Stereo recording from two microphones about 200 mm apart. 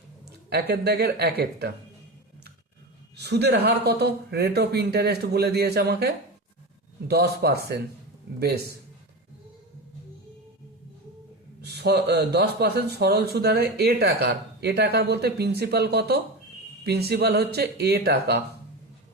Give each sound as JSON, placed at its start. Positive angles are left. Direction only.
{"t": 0.3, "sound": "speech", "side_deg": -55}
{"t": 3.2, "sound": "speech", "side_deg": -55}
{"t": 11.6, "sound": "speech", "side_deg": -55}